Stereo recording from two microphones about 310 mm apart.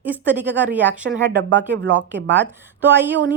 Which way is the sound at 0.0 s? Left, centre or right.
Centre.